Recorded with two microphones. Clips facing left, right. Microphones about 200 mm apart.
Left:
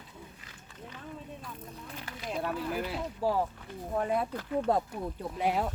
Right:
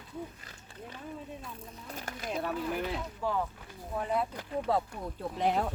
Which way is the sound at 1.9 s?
45° right (ahead or behind).